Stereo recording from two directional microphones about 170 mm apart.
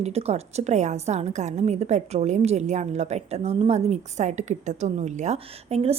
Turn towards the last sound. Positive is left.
turn(degrees=-40)  # may be behind; listen again after turning